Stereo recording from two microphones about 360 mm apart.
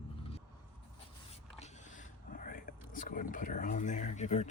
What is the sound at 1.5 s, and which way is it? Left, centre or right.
Speech, left.